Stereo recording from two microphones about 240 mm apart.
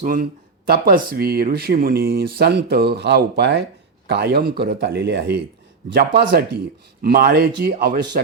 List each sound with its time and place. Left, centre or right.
0.0 s speech: right